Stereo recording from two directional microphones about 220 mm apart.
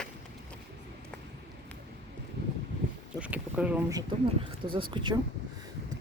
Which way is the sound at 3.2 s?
5° right (ahead or behind).